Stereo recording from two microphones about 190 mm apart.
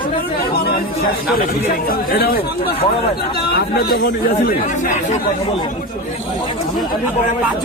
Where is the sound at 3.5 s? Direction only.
55° left (ahead or behind).